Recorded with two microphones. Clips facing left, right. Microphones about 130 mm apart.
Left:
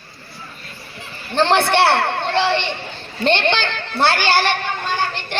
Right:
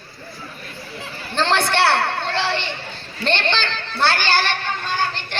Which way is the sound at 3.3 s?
15° left (ahead or behind).